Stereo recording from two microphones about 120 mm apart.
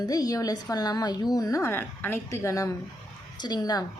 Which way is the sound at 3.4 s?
35° left (ahead or behind).